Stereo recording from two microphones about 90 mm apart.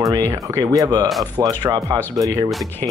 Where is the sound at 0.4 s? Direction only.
40° right (ahead or behind).